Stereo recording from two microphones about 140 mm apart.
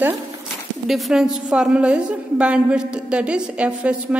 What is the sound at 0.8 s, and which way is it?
A woman's voice, centre (ahead or behind).